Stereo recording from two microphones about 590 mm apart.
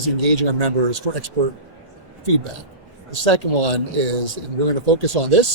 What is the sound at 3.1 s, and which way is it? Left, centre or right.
Speech, right.